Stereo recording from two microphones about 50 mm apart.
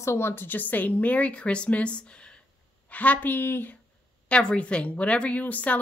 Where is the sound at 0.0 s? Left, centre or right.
Left.